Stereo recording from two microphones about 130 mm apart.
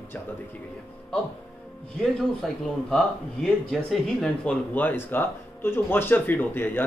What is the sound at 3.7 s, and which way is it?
Speech, 5° left (ahead or behind).